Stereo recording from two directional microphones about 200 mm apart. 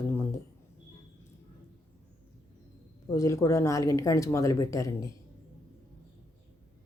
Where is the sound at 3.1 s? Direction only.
15° left (ahead or behind).